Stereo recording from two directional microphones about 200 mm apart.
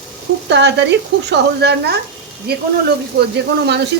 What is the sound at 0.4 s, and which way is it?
Speech, 60° right (ahead or behind).